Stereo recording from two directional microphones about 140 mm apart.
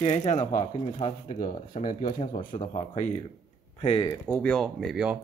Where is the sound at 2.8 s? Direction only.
55° left (ahead or behind).